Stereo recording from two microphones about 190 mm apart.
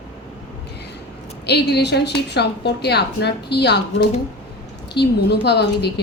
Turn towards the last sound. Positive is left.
turn(degrees=60)  # may be behind; listen again after turning